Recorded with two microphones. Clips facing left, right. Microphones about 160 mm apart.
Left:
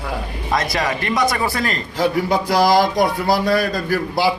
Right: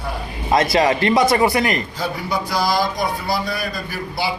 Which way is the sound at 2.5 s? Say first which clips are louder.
Left 6 dB; 90° left.